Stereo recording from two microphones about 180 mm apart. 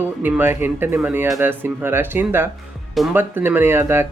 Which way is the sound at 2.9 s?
Centre (ahead or behind).